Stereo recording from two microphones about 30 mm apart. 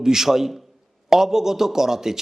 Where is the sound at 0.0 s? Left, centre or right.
Centre.